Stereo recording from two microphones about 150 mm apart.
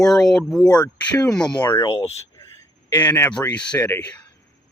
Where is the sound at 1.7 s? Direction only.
20° left (ahead or behind).